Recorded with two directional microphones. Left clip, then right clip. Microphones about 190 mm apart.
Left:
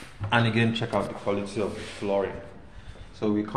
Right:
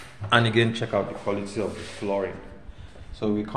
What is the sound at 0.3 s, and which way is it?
Speech, 15° right (ahead or behind).